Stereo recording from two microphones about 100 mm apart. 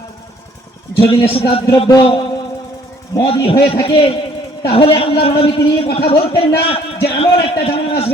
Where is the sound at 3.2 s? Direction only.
65° left (ahead or behind).